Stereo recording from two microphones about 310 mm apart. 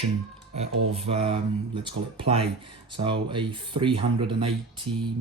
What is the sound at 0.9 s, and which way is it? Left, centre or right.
Speech, centre.